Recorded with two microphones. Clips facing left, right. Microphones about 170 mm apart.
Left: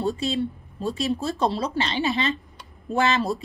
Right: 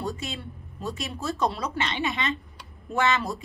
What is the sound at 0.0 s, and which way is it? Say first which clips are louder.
A woman's voice: left 8 dB; 30° left (ahead or behind).